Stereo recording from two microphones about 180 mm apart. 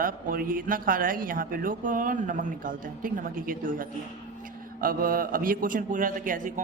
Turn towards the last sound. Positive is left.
turn(degrees=-45)  # may be behind; listen again after turning